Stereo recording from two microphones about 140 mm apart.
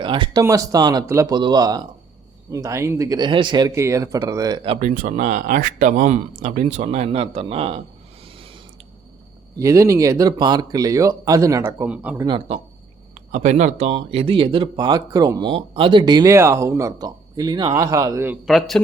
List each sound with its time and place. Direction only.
0.0 s speech: 35° right (ahead or behind)
0.4 s speech: 25° right (ahead or behind)
4.8 s speech: 60° right (ahead or behind); by 7.8 s 40° right (ahead or behind)
8.2 s a sound: 40° right (ahead or behind)
9.6 s speech: 20° right (ahead or behind)
13.3 s speech: 60° right (ahead or behind); by 18.3 s 20° right (ahead or behind)
18.4 s a man's voice: centre (ahead or behind)